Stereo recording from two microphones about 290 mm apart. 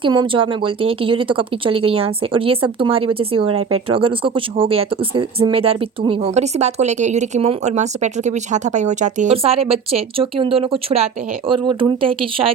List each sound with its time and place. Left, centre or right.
0.0 s speech: centre